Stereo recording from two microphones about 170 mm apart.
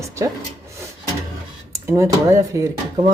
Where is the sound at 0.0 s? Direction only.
15° right (ahead or behind).